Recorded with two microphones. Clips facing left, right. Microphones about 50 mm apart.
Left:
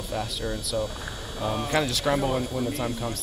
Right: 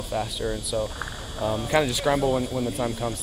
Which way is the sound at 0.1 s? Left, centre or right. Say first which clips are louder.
Right 3 dB; centre.